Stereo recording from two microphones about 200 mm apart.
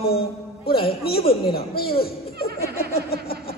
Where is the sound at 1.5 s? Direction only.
50° left (ahead or behind).